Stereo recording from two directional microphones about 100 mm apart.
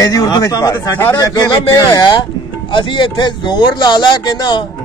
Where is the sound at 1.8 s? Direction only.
50° left (ahead or behind).